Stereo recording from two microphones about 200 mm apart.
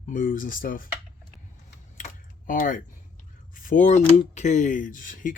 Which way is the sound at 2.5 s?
40° left (ahead or behind).